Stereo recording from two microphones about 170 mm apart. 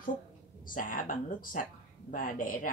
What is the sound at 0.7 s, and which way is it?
Speech, 55° left (ahead or behind).